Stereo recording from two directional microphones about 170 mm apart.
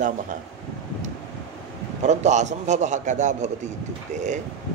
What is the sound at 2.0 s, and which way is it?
A man's voice, 45° right (ahead or behind).